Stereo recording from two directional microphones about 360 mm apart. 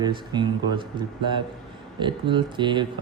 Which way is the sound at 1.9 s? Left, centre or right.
Centre.